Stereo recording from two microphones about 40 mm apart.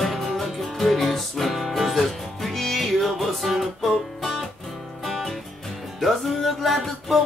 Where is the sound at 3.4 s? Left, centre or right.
Centre.